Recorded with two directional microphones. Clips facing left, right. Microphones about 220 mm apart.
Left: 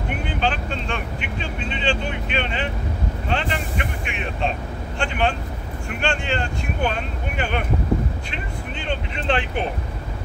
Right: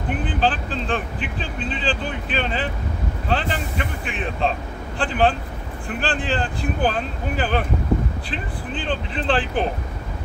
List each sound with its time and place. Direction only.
0.1 s speech: 35° right (ahead or behind)